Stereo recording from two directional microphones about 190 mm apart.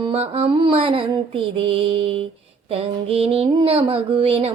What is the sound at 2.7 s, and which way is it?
Music, 30° right (ahead or behind).